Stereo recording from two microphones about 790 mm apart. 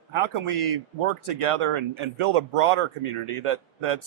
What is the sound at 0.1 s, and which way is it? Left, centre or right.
Speech, right.